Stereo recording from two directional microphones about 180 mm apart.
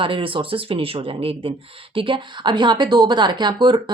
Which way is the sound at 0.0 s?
30° right (ahead or behind).